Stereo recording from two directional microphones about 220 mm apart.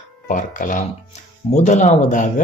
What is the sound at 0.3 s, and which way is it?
Speech, 35° left (ahead or behind).